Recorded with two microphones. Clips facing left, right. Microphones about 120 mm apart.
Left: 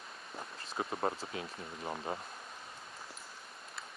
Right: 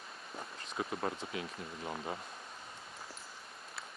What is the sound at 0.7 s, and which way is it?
Speech, 35° left (ahead or behind).